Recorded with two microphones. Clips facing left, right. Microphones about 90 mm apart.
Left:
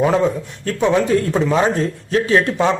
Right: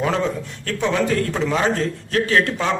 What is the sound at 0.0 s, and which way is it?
A man's voice, 15° left (ahead or behind).